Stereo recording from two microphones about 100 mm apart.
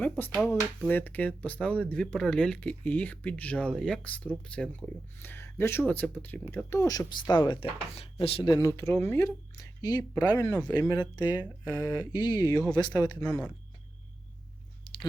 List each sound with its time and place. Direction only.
0.0 s speech: 15° left (ahead or behind)
5.3 s speech: 25° left (ahead or behind); by 8.5 s 65° left (ahead or behind)
8.5 s speech: 30° left (ahead or behind)
10.2 s speech: 35° left (ahead or behind)
10.7 s speech: 45° left (ahead or behind)